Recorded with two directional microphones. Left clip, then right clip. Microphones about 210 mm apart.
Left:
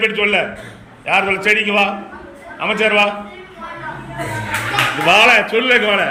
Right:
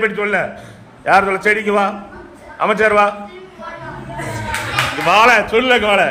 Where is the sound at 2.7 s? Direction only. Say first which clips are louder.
Right 1 dB; 30° right (ahead or behind).